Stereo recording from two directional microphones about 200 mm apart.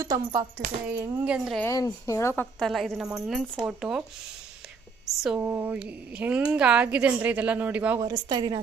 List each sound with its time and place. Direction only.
0.0 s a woman's voice: 15° right (ahead or behind)
1.6 s a woman's voice: 15° left (ahead or behind); by 4.0 s centre (ahead or behind)
5.4 s a woman's voice: 10° right (ahead or behind)